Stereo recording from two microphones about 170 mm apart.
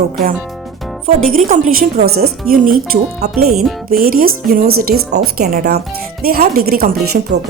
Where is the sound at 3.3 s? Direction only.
Centre (ahead or behind).